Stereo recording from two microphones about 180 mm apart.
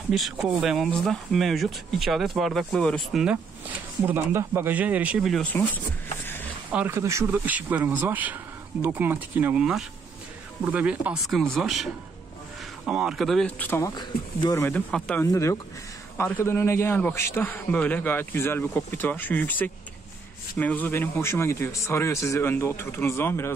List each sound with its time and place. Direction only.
0.1 s speech: centre (ahead or behind)
4.0 s speech: 10° right (ahead or behind); by 5.7 s 10° left (ahead or behind)
6.7 s a man's voice: 10° right (ahead or behind); by 15.2 s 5° left (ahead or behind)
15.3 s a man's voice: 15° left (ahead or behind)